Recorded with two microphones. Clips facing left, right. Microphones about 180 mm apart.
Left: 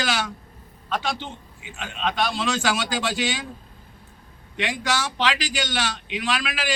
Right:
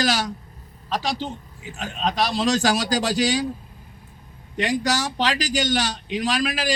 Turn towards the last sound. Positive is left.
turn(degrees=-40)  # may be behind; listen again after turning